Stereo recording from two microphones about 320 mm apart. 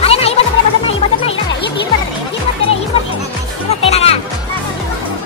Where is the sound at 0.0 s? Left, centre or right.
Centre.